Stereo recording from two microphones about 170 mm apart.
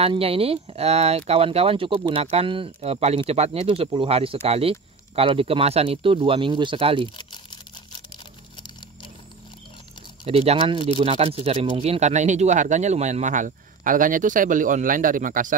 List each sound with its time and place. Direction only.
0.0 s speech: 35° right (ahead or behind)
10.2 s speech: 35° right (ahead or behind); by 15.5 s 50° right (ahead or behind)